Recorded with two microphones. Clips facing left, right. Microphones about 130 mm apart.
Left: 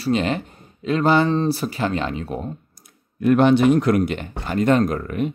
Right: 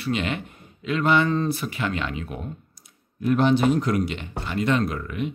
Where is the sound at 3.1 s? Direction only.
65° left (ahead or behind).